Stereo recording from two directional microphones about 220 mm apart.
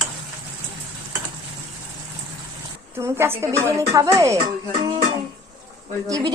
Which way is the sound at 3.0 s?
10° right (ahead or behind).